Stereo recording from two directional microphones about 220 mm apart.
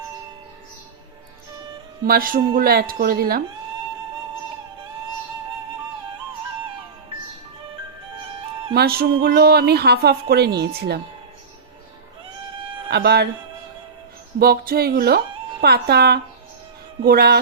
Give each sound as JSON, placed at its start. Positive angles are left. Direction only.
{"t": 2.0, "sound": "speech", "side_deg": -40}
{"t": 8.7, "sound": "speech", "side_deg": -45}
{"t": 12.9, "sound": "speech", "side_deg": -50}
{"t": 14.3, "sound": "speech", "side_deg": -45}